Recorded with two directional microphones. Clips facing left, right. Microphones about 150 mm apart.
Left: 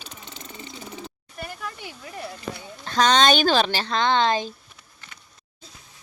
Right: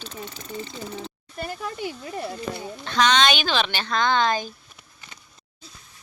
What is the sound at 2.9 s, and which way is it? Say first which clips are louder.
Speech: left 2 dB; 40° left (ahead or behind).